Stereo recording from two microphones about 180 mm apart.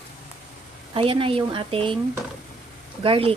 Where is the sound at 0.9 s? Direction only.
30° right (ahead or behind).